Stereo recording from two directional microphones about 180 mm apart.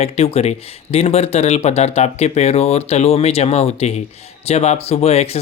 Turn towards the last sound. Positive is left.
turn(degrees=35)  # may be behind; listen again after turning